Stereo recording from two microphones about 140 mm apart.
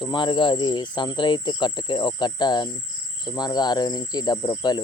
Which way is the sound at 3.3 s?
30° left (ahead or behind).